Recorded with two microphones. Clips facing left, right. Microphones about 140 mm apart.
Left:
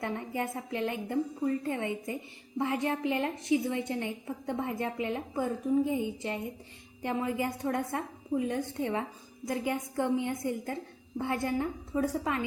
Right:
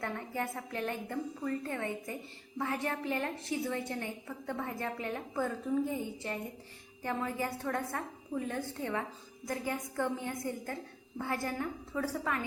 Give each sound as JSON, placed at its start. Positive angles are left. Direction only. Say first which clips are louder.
{"t": 0.0, "sound": "a woman's voice", "louder": "left 3 dB", "side_deg": 20}